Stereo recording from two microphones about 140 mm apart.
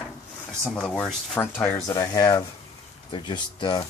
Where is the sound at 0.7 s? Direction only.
5° left (ahead or behind).